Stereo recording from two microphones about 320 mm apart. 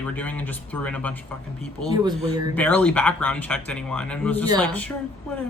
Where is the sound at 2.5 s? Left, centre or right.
Centre.